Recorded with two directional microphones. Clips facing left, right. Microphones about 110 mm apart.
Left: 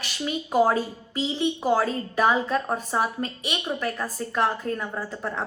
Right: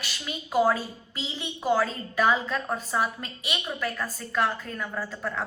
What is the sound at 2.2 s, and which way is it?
A woman's voice, 30° left (ahead or behind).